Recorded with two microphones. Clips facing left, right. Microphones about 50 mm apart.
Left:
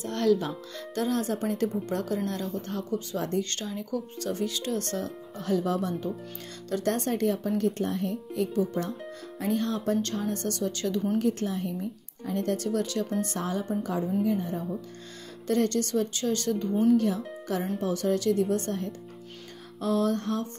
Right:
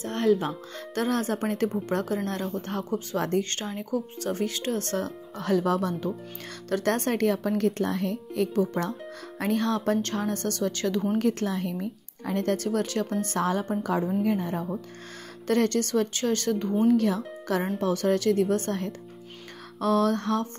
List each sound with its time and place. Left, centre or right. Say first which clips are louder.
0.1 s speech: right 1 dB; right
0.7 s speech: right 1 dB; right
3.6 s speech: right 2 dB; right
8.5 s a woman's voice: right 2 dB; right
11.1 s a woman's voice: right 2 dB; right
13.4 s a woman's voice: right 4 dB; right
16.8 s speech: right 1 dB; right
17.7 s a woman's voice: right 2 dB; right